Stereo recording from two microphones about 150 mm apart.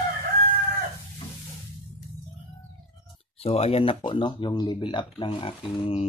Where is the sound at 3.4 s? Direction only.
40° left (ahead or behind).